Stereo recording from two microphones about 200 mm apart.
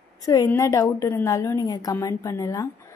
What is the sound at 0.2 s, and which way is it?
A woman's voice, 15° left (ahead or behind).